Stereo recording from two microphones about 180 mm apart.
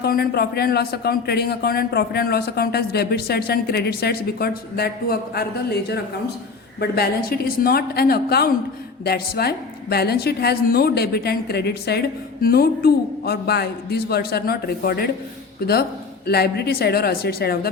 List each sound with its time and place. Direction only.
0.0 s a woman's voice: 60° left (ahead or behind)
16.2 s a woman's voice: 60° left (ahead or behind)